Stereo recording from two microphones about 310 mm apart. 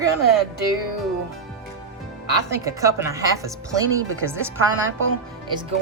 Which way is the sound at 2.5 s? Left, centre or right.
Centre.